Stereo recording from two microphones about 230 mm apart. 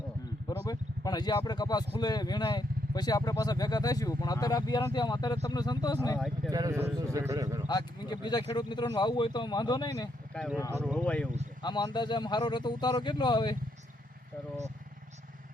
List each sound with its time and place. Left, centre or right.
0.4 s a man's voice: centre
6.1 s speech: centre
6.5 s speech: centre
7.7 s speech: centre
10.3 s speech: centre
10.7 s speech: centre
10.9 s speech: centre
11.6 s speech: centre